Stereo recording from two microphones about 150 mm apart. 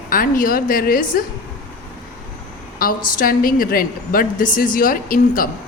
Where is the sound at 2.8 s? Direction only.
75° left (ahead or behind).